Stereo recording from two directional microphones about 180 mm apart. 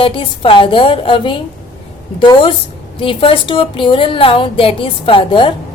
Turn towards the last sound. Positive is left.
turn(degrees=30)  # may be behind; listen again after turning